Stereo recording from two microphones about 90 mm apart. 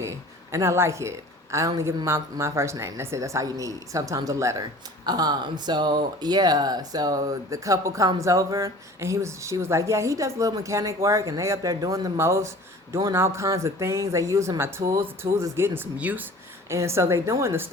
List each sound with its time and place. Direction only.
0.5 s speech: 30° right (ahead or behind)
5.0 s speech: 50° right (ahead or behind); by 16.7 s 20° right (ahead or behind)
16.7 s speech: 30° right (ahead or behind)